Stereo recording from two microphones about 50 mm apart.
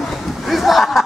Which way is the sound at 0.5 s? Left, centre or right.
Centre.